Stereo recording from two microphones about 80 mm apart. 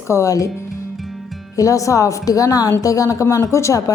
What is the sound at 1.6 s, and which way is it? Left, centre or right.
A woman's voice, left.